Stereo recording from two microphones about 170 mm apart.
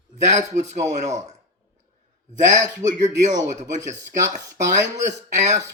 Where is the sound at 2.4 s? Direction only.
45° right (ahead or behind).